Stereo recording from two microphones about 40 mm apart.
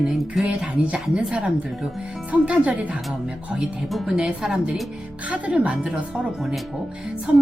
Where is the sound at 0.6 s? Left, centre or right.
Right.